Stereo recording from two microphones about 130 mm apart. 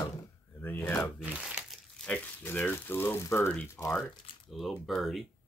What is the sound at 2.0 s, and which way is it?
Speech, 10° left (ahead or behind).